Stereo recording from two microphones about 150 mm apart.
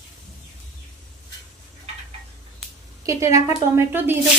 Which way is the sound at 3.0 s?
20° right (ahead or behind).